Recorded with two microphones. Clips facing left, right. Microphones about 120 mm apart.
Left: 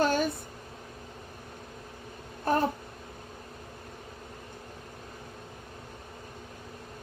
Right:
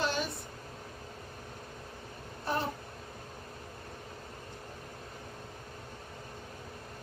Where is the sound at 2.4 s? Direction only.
50° left (ahead or behind).